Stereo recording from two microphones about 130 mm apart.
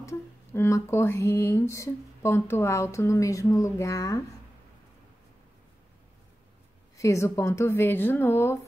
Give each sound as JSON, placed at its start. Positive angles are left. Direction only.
{"t": 0.0, "sound": "speech", "side_deg": 20}
{"t": 7.0, "sound": "speech", "side_deg": 25}